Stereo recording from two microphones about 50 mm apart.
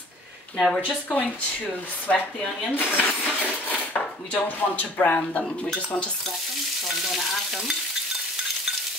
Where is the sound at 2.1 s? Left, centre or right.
Left.